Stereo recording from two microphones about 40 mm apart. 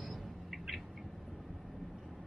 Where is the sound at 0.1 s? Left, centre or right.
Centre.